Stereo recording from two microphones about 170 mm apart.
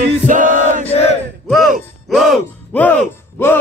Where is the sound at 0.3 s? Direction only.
50° right (ahead or behind).